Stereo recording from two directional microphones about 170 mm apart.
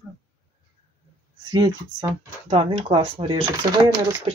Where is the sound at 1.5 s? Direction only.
25° right (ahead or behind).